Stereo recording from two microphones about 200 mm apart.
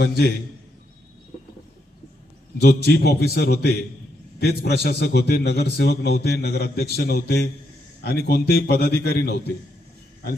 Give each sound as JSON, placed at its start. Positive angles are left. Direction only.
{"t": 0.0, "sound": "a man's voice", "side_deg": 55}
{"t": 2.6, "sound": "a man's voice", "side_deg": 55}